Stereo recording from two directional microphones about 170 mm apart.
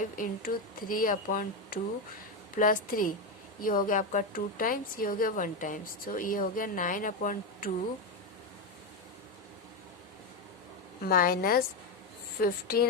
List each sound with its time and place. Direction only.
0.2 s a woman's voice: 55° left (ahead or behind)
11.0 s speech: 60° left (ahead or behind)